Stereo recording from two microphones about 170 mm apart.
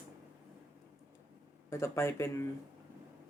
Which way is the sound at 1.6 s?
15° left (ahead or behind).